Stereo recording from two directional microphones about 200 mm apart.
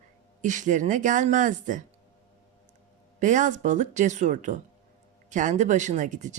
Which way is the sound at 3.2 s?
40° right (ahead or behind).